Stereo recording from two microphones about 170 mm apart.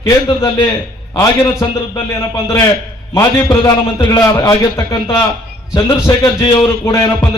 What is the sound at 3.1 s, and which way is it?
A man's voice, 20° left (ahead or behind).